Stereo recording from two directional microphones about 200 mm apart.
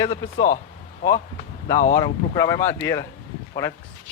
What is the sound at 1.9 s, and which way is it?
Speech, 15° left (ahead or behind).